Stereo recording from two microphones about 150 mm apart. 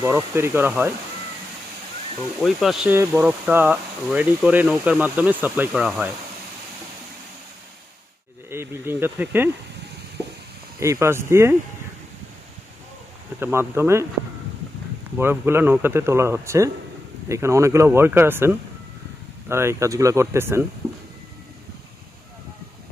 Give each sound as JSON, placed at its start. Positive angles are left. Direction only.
{"t": 0.0, "sound": "speech", "side_deg": -15}
{"t": 2.4, "sound": "speech", "side_deg": 0}
{"t": 2.9, "sound": "speech", "side_deg": -15}
{"t": 8.4, "sound": "speech", "side_deg": -15}
{"t": 10.8, "sound": "speech", "side_deg": -20}
{"t": 13.4, "sound": "speech", "side_deg": -15}
{"t": 15.2, "sound": "speech", "side_deg": -15}